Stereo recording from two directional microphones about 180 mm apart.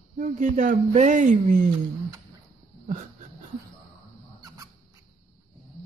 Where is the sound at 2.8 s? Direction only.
45° right (ahead or behind).